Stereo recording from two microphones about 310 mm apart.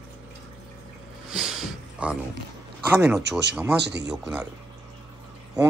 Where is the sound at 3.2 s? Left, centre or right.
Right.